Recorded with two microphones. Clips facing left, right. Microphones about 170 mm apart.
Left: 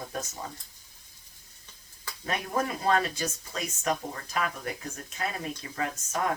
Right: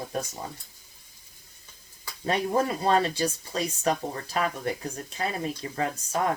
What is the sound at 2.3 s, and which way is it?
Speech, 30° right (ahead or behind).